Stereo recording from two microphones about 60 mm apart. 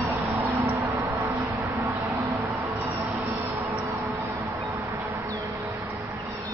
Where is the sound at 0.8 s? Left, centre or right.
Right.